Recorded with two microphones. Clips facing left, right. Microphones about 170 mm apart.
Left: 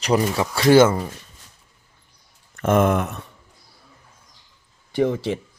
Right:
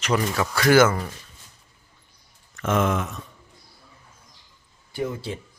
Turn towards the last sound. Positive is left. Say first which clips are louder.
# left 8 dB
turn(degrees=90)